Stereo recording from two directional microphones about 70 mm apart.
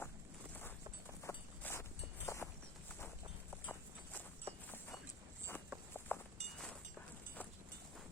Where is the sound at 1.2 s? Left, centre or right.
Left.